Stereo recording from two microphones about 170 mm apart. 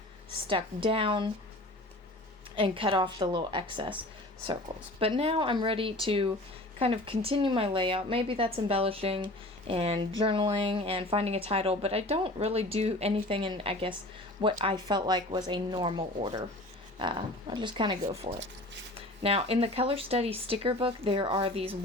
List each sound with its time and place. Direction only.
0.4 s speech: 30° right (ahead or behind)
2.6 s speech: 30° right (ahead or behind)
4.9 s speech: 35° right (ahead or behind)
18.3 s speech: 90° right
18.9 s speech: 35° right (ahead or behind)